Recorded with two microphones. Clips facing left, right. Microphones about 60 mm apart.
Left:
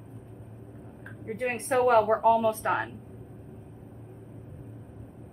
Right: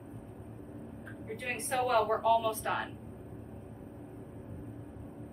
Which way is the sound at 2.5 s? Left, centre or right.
Left.